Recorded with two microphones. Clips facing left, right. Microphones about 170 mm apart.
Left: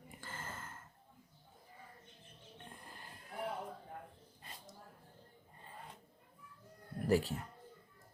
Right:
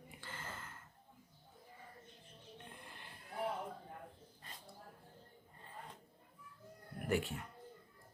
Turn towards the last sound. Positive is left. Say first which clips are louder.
# left 5 dB
turn(degrees=35)  # may be behind; listen again after turning